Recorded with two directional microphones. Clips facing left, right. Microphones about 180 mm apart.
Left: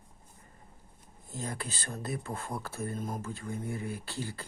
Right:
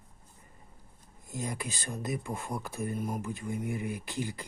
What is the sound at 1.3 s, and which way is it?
Speech, 15° right (ahead or behind).